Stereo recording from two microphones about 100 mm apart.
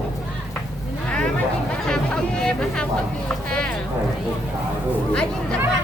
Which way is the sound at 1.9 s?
5° left (ahead or behind).